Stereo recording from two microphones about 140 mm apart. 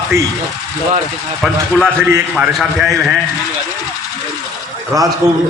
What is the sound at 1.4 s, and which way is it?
A man's voice, centre (ahead or behind).